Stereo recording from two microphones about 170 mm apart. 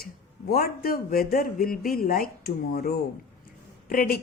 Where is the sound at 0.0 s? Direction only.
65° left (ahead or behind).